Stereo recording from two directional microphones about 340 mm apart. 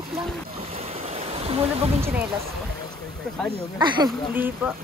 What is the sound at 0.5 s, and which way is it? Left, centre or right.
Boat, centre.